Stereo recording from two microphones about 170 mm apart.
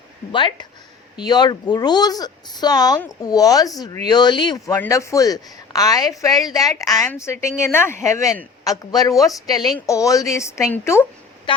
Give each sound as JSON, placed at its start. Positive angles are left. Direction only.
{"t": 0.3, "sound": "speech", "side_deg": 30}